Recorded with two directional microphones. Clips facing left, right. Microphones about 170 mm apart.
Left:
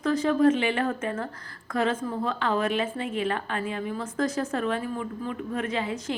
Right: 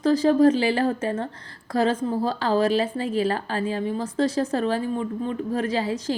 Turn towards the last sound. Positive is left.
turn(degrees=-35)  # may be behind; listen again after turning